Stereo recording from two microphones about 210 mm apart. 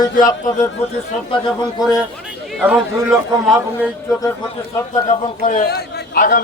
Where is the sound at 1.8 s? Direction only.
20° left (ahead or behind).